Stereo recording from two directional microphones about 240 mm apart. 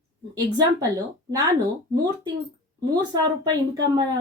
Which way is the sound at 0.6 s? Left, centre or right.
Centre.